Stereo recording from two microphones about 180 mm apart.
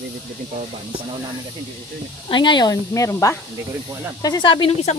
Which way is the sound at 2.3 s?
25° left (ahead or behind).